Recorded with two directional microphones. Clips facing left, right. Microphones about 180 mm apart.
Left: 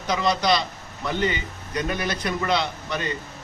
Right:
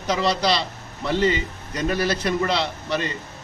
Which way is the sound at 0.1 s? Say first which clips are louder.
Even; 30° right (ahead or behind).